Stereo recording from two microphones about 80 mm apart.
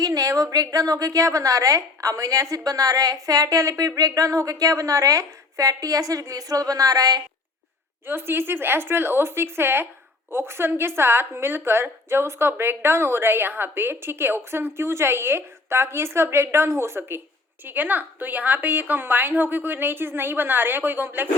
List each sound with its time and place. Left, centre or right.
0.0 s a sound: right
0.5 s a woman's voice: right
8.0 s a woman's voice: right